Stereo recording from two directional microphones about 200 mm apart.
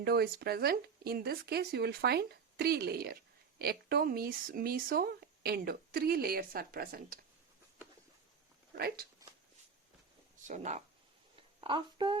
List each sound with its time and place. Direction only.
0.0 s speech: 50° right (ahead or behind)
10.4 s speech: 35° right (ahead or behind)
11.6 s speech: 25° right (ahead or behind)